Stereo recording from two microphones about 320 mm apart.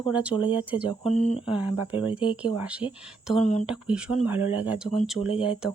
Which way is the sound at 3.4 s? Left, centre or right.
Left.